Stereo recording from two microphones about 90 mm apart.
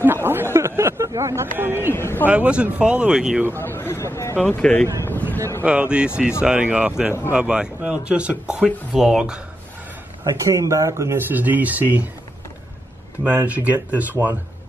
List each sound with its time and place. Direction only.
0.0 s a sound: 25° right (ahead or behind)
2.0 s speech: 25° left (ahead or behind)
2.2 s speech: 15° right (ahead or behind)
3.5 s speech: 25° left (ahead or behind)
4.4 s speech: 15° left (ahead or behind)
5.6 s speech: 15° right (ahead or behind)
10.2 s speech: 40° right (ahead or behind)
11.1 s speech: 20° right (ahead or behind)
13.2 s speech: 15° right (ahead or behind)
14.2 s speech: 35° right (ahead or behind)